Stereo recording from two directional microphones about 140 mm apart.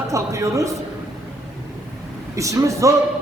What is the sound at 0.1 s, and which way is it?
Speech, 20° right (ahead or behind).